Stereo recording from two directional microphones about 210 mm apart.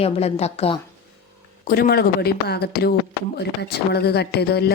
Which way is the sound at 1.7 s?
45° left (ahead or behind).